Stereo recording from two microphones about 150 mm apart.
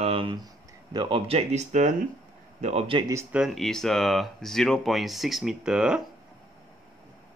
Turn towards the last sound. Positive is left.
turn(degrees=-5)  # may be behind; listen again after turning